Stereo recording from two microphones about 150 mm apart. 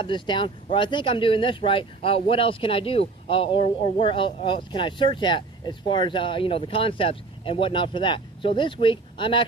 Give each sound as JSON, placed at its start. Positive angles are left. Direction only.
{"t": 0.0, "sound": "speech", "side_deg": 30}